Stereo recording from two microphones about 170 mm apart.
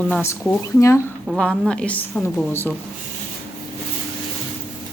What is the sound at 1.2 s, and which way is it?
A woman's voice, 5° left (ahead or behind).